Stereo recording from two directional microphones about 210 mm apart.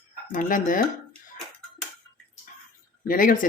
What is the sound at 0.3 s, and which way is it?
Speech, 40° left (ahead or behind).